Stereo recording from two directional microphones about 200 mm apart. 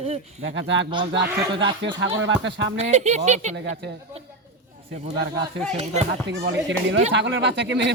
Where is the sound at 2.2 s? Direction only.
60° right (ahead or behind).